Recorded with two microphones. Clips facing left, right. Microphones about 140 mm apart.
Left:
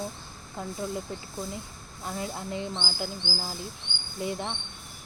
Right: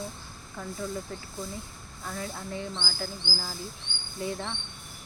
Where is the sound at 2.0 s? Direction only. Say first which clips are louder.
Left 2 dB; 20° left (ahead or behind).